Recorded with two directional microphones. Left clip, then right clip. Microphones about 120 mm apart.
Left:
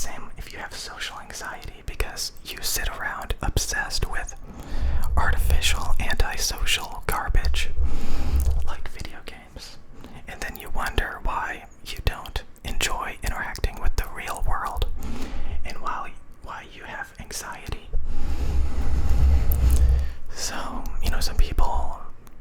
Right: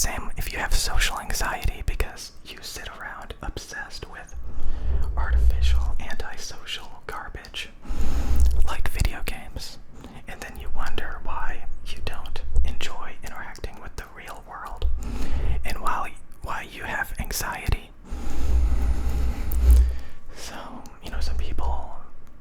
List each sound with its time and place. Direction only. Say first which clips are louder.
0.0 s whispering: right 7 dB; 45° right (ahead or behind)
2.5 s whispering: left 6 dB; 25° left (ahead or behind); by 5.9 s 50° left (ahead or behind)
6.0 s whispering: left 8 dB; 35° left (ahead or behind)
7.4 s whispering: left 4 dB; 25° left (ahead or behind)
7.9 s a sound: even; centre (ahead or behind)
8.6 s whispering: right 6 dB; 40° right (ahead or behind)
10.2 s whispering: left 4 dB; 5° left (ahead or behind)
10.8 s whispering: left 5 dB; 30° left (ahead or behind)
12.8 s whispering: left 8 dB; 40° left (ahead or behind)
15.1 s a sound: right 1 dB; centre (ahead or behind)
15.6 s whispering: right 3 dB; 25° right (ahead or behind)
18.2 s vehicle: right 1 dB; 15° right (ahead or behind); by 20.0 s 5° left (ahead or behind)
20.3 s whispering: left 7 dB; 25° left (ahead or behind)